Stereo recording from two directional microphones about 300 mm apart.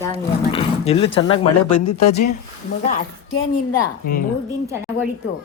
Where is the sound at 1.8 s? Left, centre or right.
Left.